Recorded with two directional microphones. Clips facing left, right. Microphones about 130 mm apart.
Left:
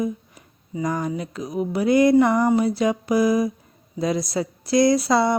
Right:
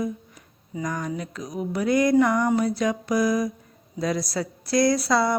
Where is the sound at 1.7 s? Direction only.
30° left (ahead or behind).